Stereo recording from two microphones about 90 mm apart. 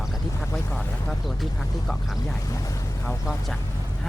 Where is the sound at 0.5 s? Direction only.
15° left (ahead or behind).